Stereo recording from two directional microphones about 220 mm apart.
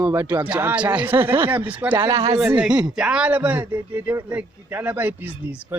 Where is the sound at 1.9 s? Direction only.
15° right (ahead or behind).